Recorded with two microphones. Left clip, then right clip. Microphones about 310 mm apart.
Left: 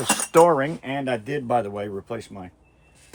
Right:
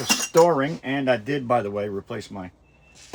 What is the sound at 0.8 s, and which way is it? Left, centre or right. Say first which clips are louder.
Speech: right 4 dB; centre.